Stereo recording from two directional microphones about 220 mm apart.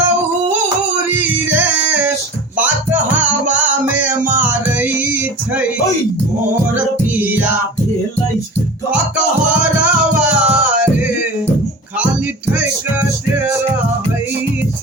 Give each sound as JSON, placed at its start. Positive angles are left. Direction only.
{"t": 1.5, "sound": "music", "side_deg": -10}
{"t": 9.5, "sound": "music", "side_deg": -5}
{"t": 12.5, "sound": "music", "side_deg": -5}